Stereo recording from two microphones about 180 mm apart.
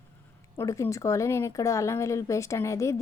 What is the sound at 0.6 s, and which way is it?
Speech, 15° left (ahead or behind).